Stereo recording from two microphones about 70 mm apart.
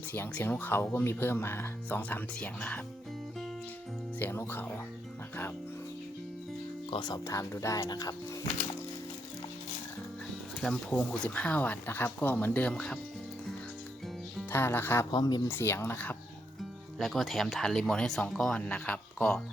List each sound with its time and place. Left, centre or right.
0.1 s speech: left
2.0 s speech: left
4.2 s speech: left
7.3 s speech: left
7.9 s speech: left
10.6 s speech: centre
12.7 s speech: centre
14.5 s speech: left
15.1 s speech: left
15.4 s speech: left
17.0 s speech: centre; by 19.4 s left